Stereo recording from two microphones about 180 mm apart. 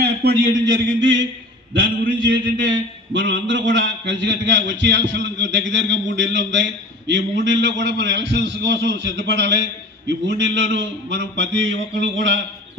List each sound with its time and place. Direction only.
0.0 s a man's voice: 60° right (ahead or behind); by 1.3 s 90° right
2.6 s a man's voice: 90° right